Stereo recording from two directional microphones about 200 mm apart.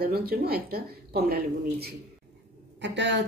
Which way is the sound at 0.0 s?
50° right (ahead or behind).